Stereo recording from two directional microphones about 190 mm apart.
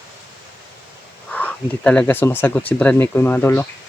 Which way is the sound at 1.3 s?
5° left (ahead or behind).